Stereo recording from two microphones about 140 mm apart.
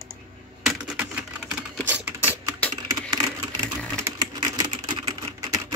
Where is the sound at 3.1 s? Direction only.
30° right (ahead or behind).